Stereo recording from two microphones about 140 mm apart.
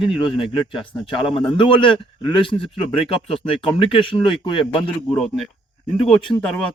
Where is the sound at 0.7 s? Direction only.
40° left (ahead or behind).